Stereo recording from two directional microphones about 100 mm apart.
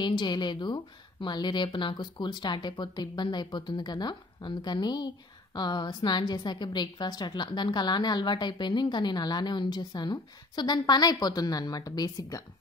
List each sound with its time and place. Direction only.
0.0 s speech: 50° left (ahead or behind)